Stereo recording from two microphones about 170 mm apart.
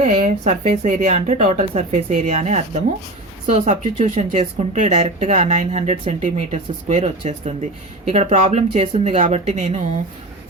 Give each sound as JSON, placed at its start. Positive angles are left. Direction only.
{"t": 0.0, "sound": "speech", "side_deg": -45}